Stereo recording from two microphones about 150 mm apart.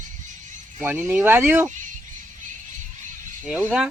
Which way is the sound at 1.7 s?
60° right (ahead or behind).